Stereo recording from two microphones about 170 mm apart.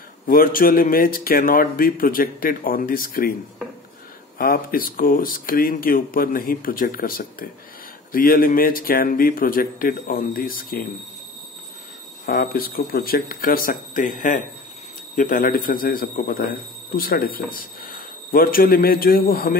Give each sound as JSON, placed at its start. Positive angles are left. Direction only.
{"t": 0.3, "sound": "speech", "side_deg": 55}
{"t": 4.4, "sound": "speech", "side_deg": 55}
{"t": 12.3, "sound": "speech", "side_deg": 60}